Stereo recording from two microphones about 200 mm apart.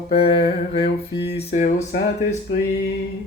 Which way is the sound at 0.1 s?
30° left (ahead or behind).